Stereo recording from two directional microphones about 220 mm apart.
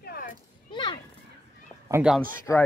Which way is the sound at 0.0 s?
40° left (ahead or behind).